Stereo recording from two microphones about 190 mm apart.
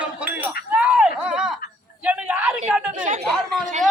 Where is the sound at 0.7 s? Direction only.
5° right (ahead or behind).